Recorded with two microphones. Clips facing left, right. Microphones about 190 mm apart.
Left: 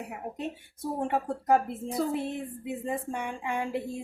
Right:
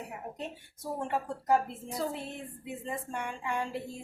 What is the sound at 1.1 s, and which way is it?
Speech, 55° left (ahead or behind).